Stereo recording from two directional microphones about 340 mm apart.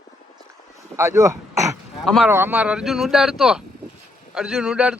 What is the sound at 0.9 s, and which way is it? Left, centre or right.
Speech, centre.